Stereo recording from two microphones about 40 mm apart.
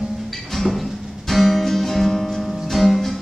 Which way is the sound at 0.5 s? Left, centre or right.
Centre.